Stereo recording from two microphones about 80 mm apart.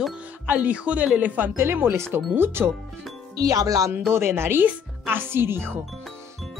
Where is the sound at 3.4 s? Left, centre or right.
Right.